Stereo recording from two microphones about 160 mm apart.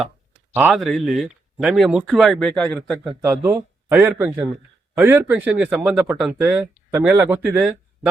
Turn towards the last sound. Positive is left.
turn(degrees=-10)  # may be behind; listen again after turning